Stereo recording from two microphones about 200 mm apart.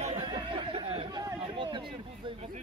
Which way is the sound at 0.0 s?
25° right (ahead or behind).